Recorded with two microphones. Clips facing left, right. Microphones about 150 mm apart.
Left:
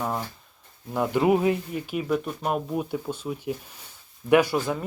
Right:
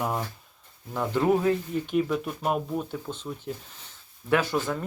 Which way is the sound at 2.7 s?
10° left (ahead or behind).